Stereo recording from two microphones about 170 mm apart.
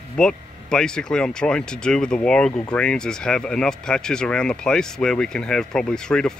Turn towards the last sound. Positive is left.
turn(degrees=5)  # may be behind; listen again after turning